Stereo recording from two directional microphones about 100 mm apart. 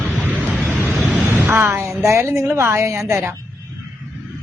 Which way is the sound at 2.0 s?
30° right (ahead or behind).